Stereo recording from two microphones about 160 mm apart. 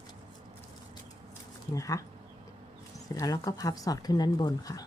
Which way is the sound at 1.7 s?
20° left (ahead or behind).